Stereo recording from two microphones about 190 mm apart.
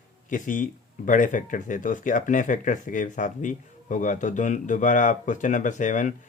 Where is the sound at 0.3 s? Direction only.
45° left (ahead or behind).